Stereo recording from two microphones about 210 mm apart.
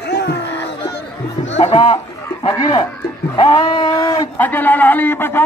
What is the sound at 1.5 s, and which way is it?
Speech, 30° left (ahead or behind).